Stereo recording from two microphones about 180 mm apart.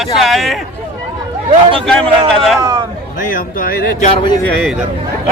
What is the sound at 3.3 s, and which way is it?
Speech, 50° left (ahead or behind).